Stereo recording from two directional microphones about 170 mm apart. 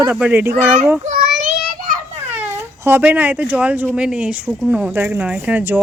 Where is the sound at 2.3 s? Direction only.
15° right (ahead or behind).